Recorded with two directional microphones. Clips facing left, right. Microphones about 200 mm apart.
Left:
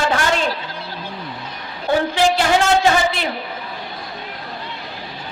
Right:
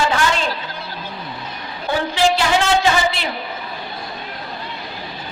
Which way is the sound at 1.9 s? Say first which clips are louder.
Left 1 dB; 50° left (ahead or behind).